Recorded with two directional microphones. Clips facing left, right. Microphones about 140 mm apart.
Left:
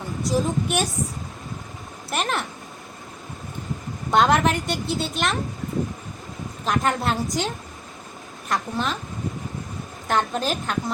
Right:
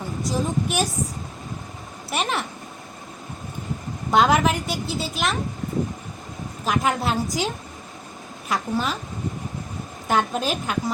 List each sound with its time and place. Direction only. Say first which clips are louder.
0.2 s a woman's voice: left 2 dB; centre (ahead or behind)
2.0 s a woman's voice: even; centre (ahead or behind)
4.1 s a woman's voice: even; centre (ahead or behind)
6.7 s a woman's voice: even; 5° right (ahead or behind)
10.1 s a woman's voice: right 1 dB; 5° right (ahead or behind)